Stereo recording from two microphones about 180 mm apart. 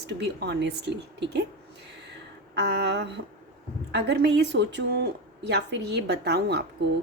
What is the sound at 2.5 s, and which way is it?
Speech, 75° right (ahead or behind).